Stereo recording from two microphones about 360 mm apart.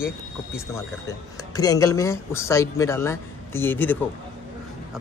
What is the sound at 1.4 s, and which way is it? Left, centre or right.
Speech, centre.